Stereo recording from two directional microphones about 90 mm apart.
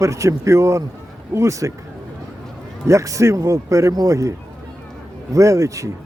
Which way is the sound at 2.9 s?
35° right (ahead or behind).